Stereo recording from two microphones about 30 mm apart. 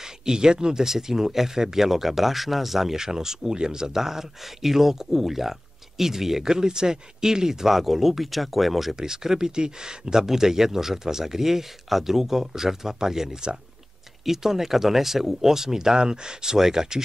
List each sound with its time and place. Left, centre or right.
0.0 s speech: right
0.8 s speech: centre
3.0 s speech: centre
3.9 s speech: centre
8.9 s speech: centre